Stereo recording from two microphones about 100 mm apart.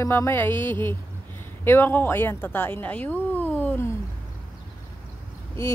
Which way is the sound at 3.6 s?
25° left (ahead or behind).